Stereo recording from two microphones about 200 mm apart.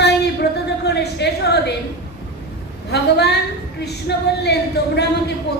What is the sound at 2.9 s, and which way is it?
A woman's voice, 55° left (ahead or behind).